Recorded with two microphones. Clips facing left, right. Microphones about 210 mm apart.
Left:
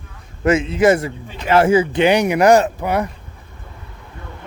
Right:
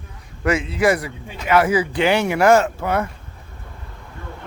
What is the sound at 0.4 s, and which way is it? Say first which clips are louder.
Speech: left 4 dB; 20° left (ahead or behind).